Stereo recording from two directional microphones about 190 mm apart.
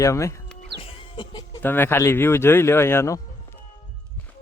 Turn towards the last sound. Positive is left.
turn(degrees=15)  # may be behind; listen again after turning